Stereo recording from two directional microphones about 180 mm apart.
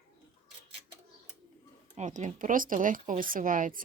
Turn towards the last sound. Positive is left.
turn(degrees=-45)  # may be behind; listen again after turning